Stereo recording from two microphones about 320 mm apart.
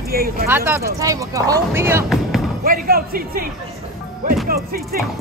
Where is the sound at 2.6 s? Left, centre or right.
Right.